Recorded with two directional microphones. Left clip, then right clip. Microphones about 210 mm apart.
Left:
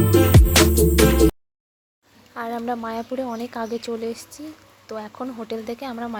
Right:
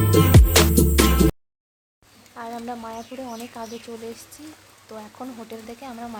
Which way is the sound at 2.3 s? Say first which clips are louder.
Left 6 dB; 25° left (ahead or behind).